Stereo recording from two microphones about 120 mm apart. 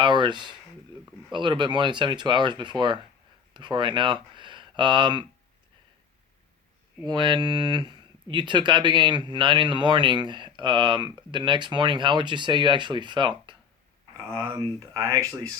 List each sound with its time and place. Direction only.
0.0 s speech: 40° right (ahead or behind)
7.1 s speech: 40° right (ahead or behind)
14.2 s speech: 25° right (ahead or behind)